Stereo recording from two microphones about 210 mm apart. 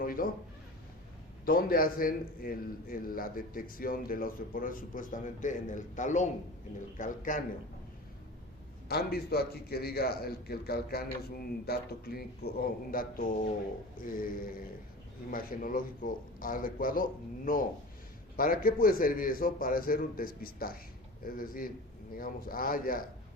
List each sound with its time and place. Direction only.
0.0 s a sound: 40° left (ahead or behind)
1.5 s a man's voice: 45° left (ahead or behind)
8.9 s a man's voice: 50° left (ahead or behind)